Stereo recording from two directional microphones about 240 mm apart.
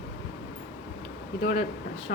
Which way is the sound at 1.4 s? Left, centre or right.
Left.